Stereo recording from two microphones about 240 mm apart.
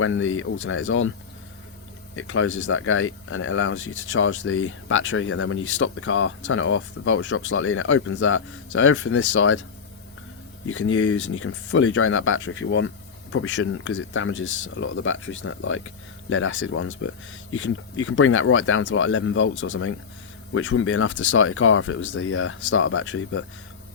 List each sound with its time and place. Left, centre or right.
0.0 s speech: left
2.1 s speech: left
10.7 s speech: left